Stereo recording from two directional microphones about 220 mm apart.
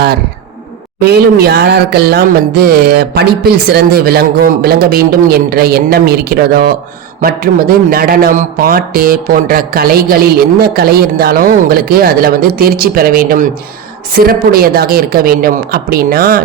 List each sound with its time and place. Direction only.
0.9 s a man's voice: 45° right (ahead or behind)